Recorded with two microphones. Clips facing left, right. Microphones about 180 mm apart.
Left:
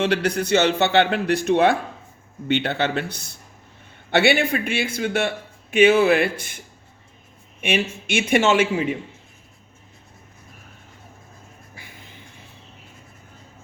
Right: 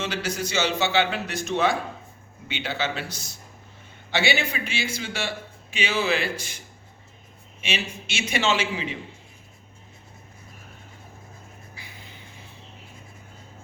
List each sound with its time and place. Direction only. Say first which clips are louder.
0.0 s a man's voice: left 8 dB; 60° left (ahead or behind)
7.6 s a man's voice: left 8 dB; 55° left (ahead or behind)
11.7 s a sound: left 1 dB; 50° left (ahead or behind)